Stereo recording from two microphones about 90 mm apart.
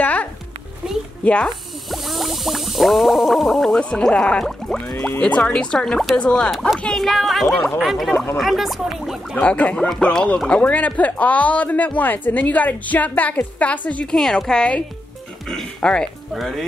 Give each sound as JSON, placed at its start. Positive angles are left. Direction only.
{"t": 0.0, "sound": "music", "side_deg": 15}
{"t": 1.2, "sound": "speech", "side_deg": 15}
{"t": 1.9, "sound": "a sound", "side_deg": 0}
{"t": 5.2, "sound": "speech", "side_deg": 10}
{"t": 6.8, "sound": "a sound", "side_deg": 5}
{"t": 9.4, "sound": "speech", "side_deg": 15}